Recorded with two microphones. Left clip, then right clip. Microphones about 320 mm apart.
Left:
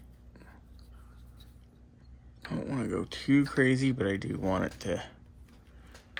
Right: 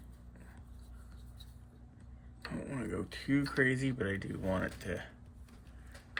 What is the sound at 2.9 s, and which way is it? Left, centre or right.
Speech, centre.